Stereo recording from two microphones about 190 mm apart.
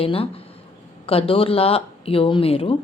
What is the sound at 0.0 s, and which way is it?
Speech, 30° left (ahead or behind).